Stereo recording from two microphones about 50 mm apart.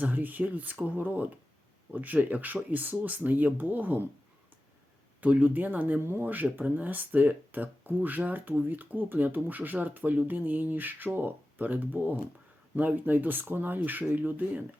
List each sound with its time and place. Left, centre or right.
0.0 s speech: right
5.2 s speech: right
6.0 s speech: right
6.2 s speech: right